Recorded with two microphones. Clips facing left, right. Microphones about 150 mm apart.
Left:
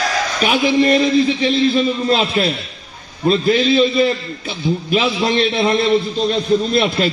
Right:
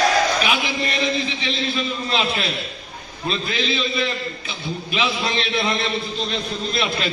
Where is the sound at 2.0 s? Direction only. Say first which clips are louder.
Left 7 dB; 40° left (ahead or behind).